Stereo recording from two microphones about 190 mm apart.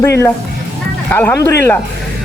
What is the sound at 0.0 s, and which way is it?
A man's voice, 15° left (ahead or behind).